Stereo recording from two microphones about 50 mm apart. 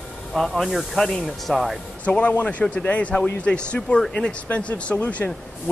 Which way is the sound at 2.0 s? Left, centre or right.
Left.